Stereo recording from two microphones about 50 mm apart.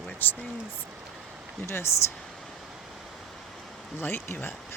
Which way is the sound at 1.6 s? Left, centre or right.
Left.